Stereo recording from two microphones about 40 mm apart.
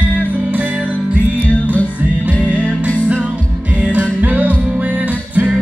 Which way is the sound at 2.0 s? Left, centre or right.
Right.